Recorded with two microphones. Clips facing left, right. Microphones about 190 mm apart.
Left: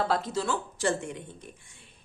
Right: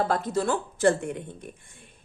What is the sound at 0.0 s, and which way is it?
A woman's voice, 50° right (ahead or behind).